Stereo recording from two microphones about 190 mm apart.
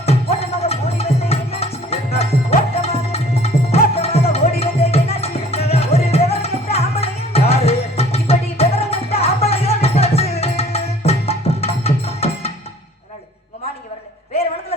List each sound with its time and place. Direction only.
0.0 s music: 30° left (ahead or behind)